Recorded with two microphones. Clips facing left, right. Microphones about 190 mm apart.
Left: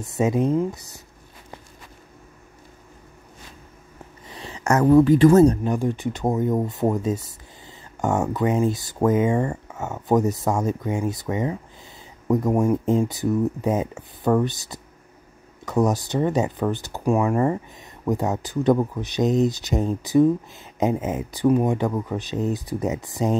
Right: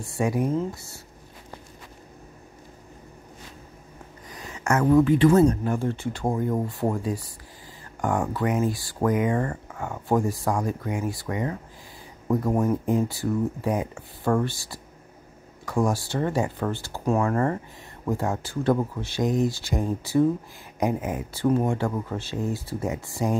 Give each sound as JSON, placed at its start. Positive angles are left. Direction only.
{"t": 0.0, "sound": "speech", "side_deg": 20}
{"t": 4.3, "sound": "speech", "side_deg": 30}
{"t": 5.6, "sound": "speech", "side_deg": 15}